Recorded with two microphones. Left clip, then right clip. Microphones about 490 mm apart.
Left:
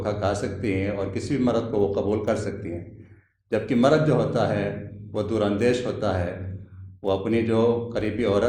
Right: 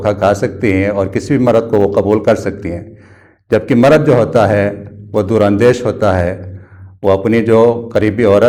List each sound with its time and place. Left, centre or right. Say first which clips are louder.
0.0 s a man's voice: right 13 dB; right